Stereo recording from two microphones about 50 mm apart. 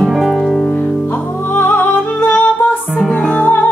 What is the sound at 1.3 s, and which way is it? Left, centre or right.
Music, left.